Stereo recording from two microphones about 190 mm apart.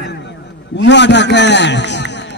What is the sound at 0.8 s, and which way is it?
A man's voice, 65° left (ahead or behind).